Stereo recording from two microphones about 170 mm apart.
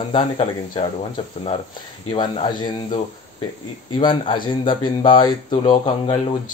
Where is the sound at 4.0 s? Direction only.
30° left (ahead or behind).